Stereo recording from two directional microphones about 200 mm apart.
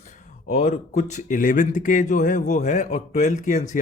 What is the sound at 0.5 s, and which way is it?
Speech, 35° left (ahead or behind).